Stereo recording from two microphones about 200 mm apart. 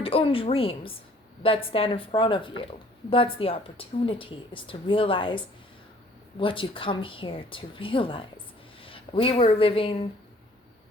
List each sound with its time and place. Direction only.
0.0 s a woman's voice: 25° left (ahead or behind)
6.4 s a woman's voice: 25° left (ahead or behind)